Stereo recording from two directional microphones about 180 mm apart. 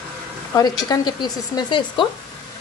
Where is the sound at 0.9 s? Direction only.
20° left (ahead or behind).